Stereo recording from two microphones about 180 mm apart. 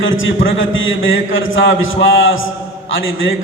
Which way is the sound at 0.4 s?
90° left.